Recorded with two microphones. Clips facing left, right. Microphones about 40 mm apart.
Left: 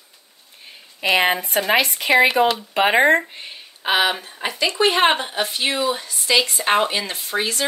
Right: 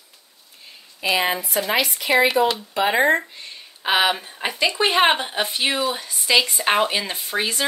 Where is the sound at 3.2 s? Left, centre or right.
Left.